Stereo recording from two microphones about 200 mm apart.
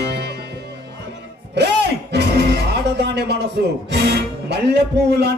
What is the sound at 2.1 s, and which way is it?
Music, 55° right (ahead or behind).